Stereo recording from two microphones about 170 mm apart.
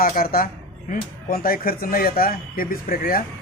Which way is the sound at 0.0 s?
60° left (ahead or behind).